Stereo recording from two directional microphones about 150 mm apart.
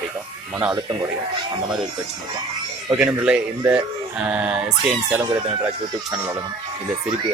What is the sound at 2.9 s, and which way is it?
Speech, 5° right (ahead or behind).